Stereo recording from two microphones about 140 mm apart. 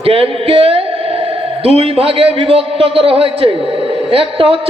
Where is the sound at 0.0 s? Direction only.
45° right (ahead or behind).